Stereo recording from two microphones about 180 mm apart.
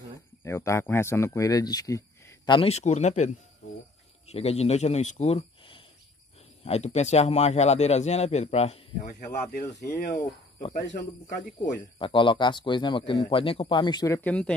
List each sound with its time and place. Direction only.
0.4 s speech: 15° left (ahead or behind); by 3.3 s 40° left (ahead or behind)
4.3 s speech: 35° left (ahead or behind); by 10.2 s 55° left (ahead or behind)
12.0 s speech: 30° left (ahead or behind); by 14.5 s 5° left (ahead or behind)